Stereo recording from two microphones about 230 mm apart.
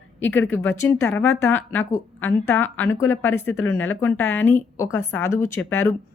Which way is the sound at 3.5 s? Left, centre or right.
Left.